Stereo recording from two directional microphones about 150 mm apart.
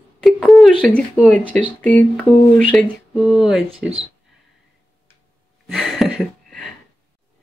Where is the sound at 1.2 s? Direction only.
10° right (ahead or behind).